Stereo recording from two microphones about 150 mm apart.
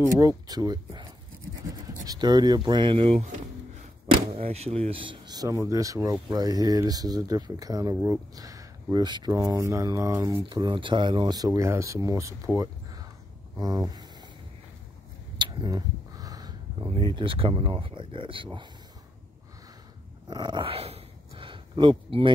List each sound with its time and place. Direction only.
0.0 s speech: 20° right (ahead or behind)
2.0 s speech: 25° right (ahead or behind)
10.5 s speech: 30° right (ahead or behind)
13.6 s a sound: 25° right (ahead or behind)
15.3 s a sound: 30° right (ahead or behind)
17.1 s speech: 35° right (ahead or behind)
20.2 s dog: 30° right (ahead or behind)